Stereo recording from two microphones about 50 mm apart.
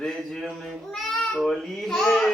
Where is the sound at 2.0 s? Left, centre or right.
Centre.